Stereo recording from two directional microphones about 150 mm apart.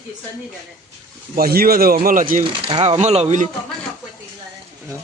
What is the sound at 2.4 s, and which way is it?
Speech, 40° right (ahead or behind).